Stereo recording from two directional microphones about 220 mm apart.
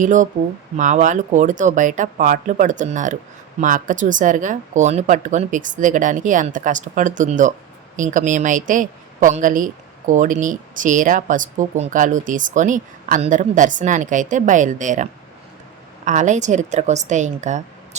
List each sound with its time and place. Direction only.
0.0 s speech: 35° right (ahead or behind)